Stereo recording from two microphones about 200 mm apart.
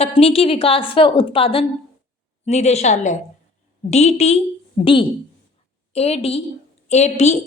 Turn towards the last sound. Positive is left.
turn(degrees=35)  # may be behind; listen again after turning